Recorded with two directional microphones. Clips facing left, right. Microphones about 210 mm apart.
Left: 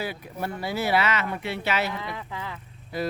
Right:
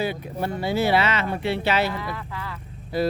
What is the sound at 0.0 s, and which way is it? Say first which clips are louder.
Speech: right 5 dB; 25° right (ahead or behind).